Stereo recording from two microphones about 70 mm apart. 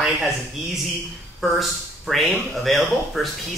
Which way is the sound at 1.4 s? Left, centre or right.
Centre.